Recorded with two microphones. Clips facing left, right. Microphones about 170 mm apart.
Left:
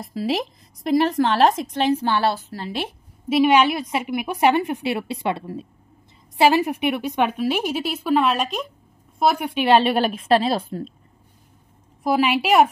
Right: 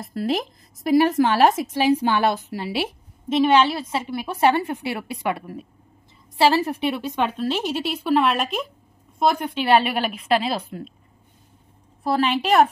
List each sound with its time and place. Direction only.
0.0 s speech: centre (ahead or behind)
3.3 s a woman's voice: 10° left (ahead or behind)
9.2 s a woman's voice: 10° left (ahead or behind); by 10.9 s 40° left (ahead or behind)
12.0 s a woman's voice: 10° left (ahead or behind)